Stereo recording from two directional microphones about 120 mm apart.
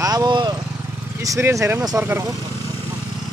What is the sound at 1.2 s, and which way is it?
Speech, 25° right (ahead or behind).